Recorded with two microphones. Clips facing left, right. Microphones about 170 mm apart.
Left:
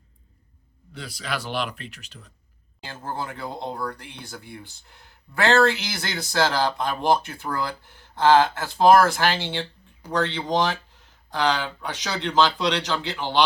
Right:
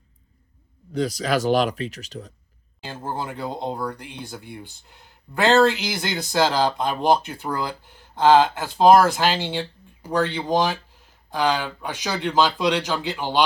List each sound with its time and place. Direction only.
0.9 s speech: 40° right (ahead or behind)
2.8 s speech: 15° right (ahead or behind)